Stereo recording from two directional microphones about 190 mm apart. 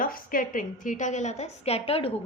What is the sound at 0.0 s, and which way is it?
A woman's voice, 50° left (ahead or behind).